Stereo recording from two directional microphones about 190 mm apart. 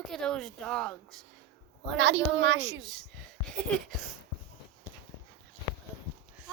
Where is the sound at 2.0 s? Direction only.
70° right (ahead or behind).